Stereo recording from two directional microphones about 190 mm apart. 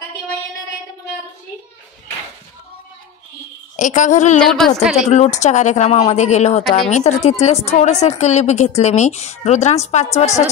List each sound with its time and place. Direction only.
3.7 s speech: 40° left (ahead or behind)
4.4 s a woman's voice: centre (ahead or behind)
5.0 s speech: 35° left (ahead or behind)